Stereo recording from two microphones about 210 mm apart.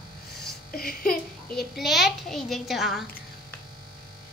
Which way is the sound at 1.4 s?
Centre (ahead or behind).